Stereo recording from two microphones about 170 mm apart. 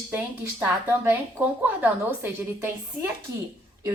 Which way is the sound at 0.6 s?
10° right (ahead or behind).